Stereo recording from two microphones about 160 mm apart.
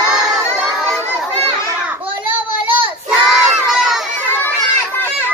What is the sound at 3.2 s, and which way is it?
Crowd, 5° right (ahead or behind).